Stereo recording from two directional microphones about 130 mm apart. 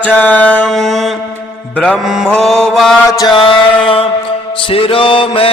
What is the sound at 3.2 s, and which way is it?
Music, 35° left (ahead or behind).